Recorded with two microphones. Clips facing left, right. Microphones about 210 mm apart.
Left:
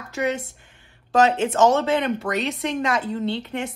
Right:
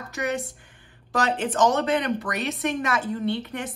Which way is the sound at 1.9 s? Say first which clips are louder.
Left 2 dB; 25° left (ahead or behind).